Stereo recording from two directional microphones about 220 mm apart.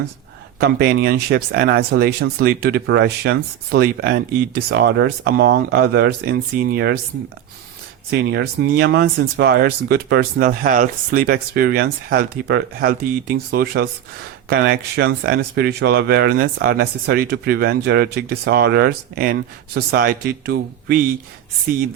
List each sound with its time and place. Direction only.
0.6 s speech: 45° right (ahead or behind)
8.1 s speech: 50° right (ahead or behind)